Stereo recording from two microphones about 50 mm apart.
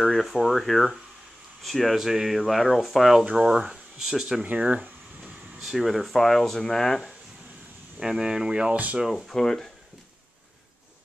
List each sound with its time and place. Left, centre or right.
0.0 s speech: centre
2.0 s speech: centre
3.3 s speech: centre
4.5 s speech: right
5.8 s speech: centre
8.0 s speech: centre
9.0 s speech: centre